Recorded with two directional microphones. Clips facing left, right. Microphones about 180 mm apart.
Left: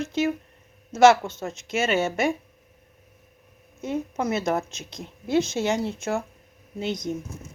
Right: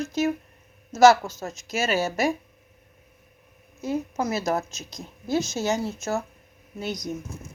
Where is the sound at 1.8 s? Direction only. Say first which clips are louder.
Even; 35° right (ahead or behind).